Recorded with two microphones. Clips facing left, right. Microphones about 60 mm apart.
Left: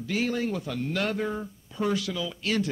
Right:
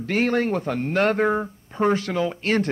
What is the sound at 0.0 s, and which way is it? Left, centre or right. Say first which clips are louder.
Speech: right 6 dB; right.